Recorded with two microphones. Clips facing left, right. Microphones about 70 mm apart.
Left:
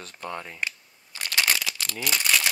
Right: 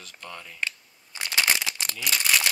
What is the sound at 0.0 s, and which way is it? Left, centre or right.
Speech, left.